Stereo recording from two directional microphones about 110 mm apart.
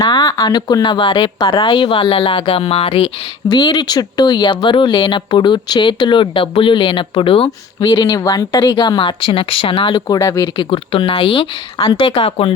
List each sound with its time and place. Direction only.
0.1 s speech: 35° left (ahead or behind); by 3.1 s 60° left (ahead or behind)
3.5 s speech: 40° left (ahead or behind)
7.8 s speech: 35° left (ahead or behind)
10.2 s speech: 30° left (ahead or behind)
10.6 s speech: 55° left (ahead or behind)